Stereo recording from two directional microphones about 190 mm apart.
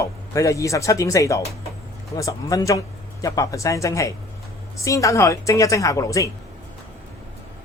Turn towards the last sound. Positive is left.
turn(degrees=15)  # may be behind; listen again after turning